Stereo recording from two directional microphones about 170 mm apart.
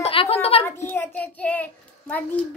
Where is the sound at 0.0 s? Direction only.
35° left (ahead or behind).